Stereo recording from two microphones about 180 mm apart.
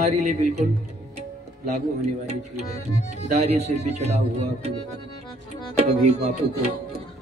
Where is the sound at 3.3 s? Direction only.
40° right (ahead or behind).